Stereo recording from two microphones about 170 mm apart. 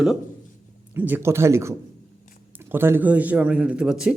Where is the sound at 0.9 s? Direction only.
10° right (ahead or behind).